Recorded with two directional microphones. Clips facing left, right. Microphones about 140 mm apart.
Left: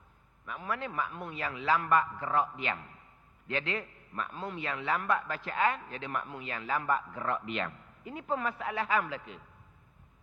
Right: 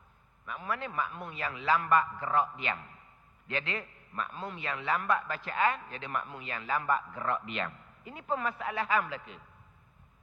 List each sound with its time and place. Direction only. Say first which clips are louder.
0.4 s a man's voice: even; 25° left (ahead or behind)